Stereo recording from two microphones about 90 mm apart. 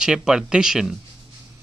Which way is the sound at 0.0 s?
10° right (ahead or behind).